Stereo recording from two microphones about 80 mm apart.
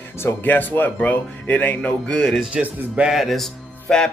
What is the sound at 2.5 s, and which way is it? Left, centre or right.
Speech, centre.